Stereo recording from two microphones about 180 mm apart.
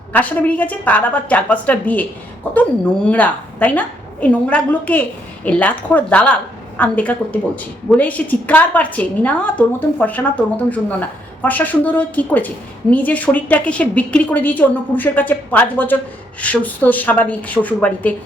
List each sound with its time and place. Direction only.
0.1 s a woman's voice: 10° left (ahead or behind)